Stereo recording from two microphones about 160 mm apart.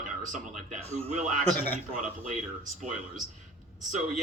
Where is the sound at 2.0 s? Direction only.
50° right (ahead or behind).